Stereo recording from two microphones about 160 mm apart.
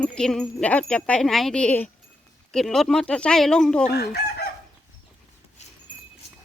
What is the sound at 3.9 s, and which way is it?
Chicken, 85° left.